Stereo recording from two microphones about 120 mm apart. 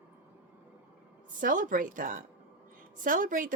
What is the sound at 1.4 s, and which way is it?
Speech, 90° right.